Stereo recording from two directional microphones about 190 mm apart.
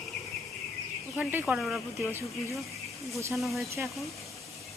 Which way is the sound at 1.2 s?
10° right (ahead or behind).